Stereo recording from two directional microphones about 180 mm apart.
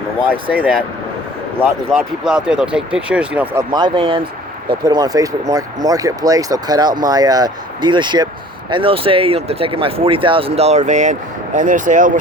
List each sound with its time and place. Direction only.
0.4 s speech: 10° right (ahead or behind)
1.9 s speech: 5° right (ahead or behind); by 12.1 s 45° right (ahead or behind)